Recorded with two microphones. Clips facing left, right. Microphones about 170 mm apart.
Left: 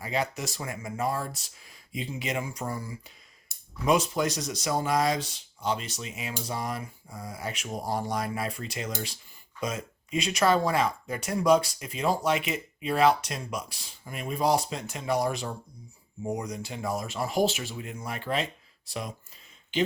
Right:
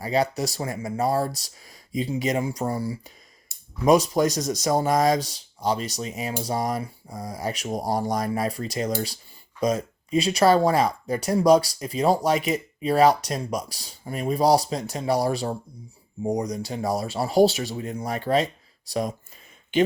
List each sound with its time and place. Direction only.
0.0 s speech: 35° right (ahead or behind)